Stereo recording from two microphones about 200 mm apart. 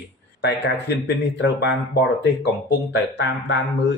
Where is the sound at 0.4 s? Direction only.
60° left (ahead or behind).